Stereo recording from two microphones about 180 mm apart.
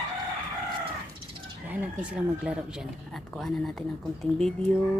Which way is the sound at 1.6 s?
10° right (ahead or behind).